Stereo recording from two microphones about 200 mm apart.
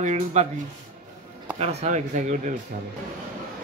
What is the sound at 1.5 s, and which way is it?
Speech, 30° right (ahead or behind).